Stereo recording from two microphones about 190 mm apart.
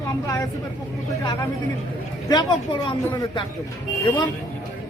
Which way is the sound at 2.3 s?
20° left (ahead or behind).